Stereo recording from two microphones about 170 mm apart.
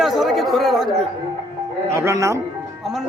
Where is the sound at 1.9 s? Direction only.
15° right (ahead or behind).